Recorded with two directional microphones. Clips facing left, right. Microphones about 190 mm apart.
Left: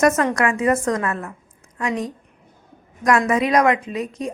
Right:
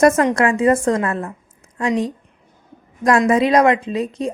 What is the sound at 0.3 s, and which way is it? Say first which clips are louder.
A woman's voice: right 4 dB; 30° right (ahead or behind).